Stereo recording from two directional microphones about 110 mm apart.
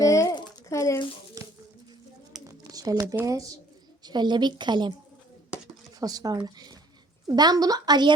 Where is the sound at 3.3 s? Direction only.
30° right (ahead or behind).